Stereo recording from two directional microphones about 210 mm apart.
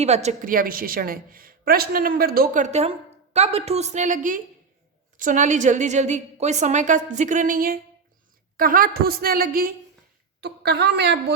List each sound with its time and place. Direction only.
0.0 s a woman's voice: 30° right (ahead or behind); by 11.3 s 55° right (ahead or behind)